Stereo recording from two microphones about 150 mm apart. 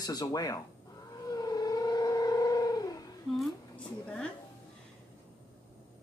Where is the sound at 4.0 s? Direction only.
5° left (ahead or behind).